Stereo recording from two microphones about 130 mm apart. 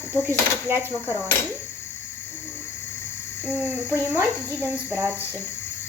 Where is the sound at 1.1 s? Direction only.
20° left (ahead or behind).